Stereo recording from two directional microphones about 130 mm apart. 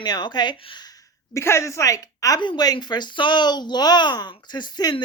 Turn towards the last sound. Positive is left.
turn(degrees=35)  # may be behind; listen again after turning